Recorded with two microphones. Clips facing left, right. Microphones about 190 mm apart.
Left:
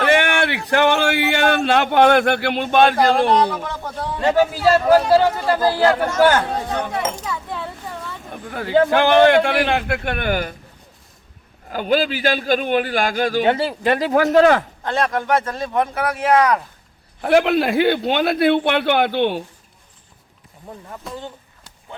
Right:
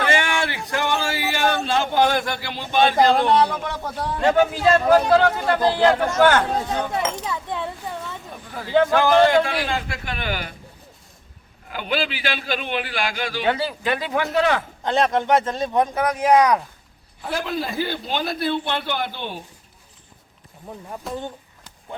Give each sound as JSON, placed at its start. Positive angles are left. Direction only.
{"t": 0.0, "sound": "speech", "side_deg": 60}
{"t": 3.8, "sound": "a man's voice", "side_deg": -5}
{"t": 7.3, "sound": "a child's voice", "side_deg": -20}
{"t": 8.4, "sound": "a man's voice", "side_deg": 65}
{"t": 11.7, "sound": "a man's voice", "side_deg": 40}
{"t": 13.5, "sound": "speech", "side_deg": 30}
{"t": 13.8, "sound": "a man's voice", "side_deg": 40}
{"t": 14.8, "sound": "speech", "side_deg": -20}
{"t": 17.2, "sound": "a man's voice", "side_deg": 70}
{"t": 21.0, "sound": "a man's voice", "side_deg": 0}